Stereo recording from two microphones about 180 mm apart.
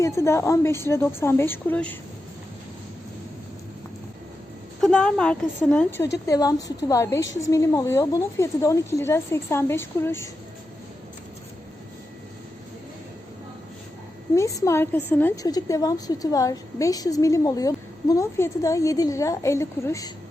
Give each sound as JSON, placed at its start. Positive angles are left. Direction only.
{"t": 0.0, "sound": "speech", "side_deg": 15}
{"t": 4.8, "sound": "a woman's voice", "side_deg": 5}
{"t": 14.3, "sound": "a woman's voice", "side_deg": 15}